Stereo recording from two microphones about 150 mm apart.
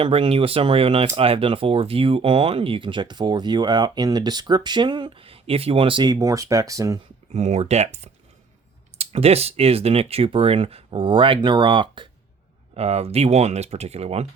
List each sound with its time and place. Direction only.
0.0 s speech: 40° right (ahead or behind); by 7.0 s 20° right (ahead or behind)
7.3 s speech: 45° right (ahead or behind)
12.7 s speech: 45° right (ahead or behind)